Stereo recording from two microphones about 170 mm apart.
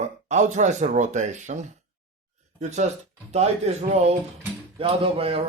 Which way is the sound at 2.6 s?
45° right (ahead or behind).